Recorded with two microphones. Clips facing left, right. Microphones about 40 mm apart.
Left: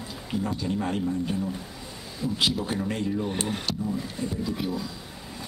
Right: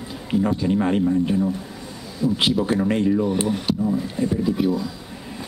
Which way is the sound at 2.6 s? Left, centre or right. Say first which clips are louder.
Right 9 dB; right.